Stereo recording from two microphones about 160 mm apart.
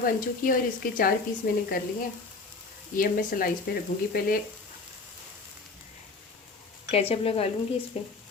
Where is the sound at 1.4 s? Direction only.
70° left (ahead or behind).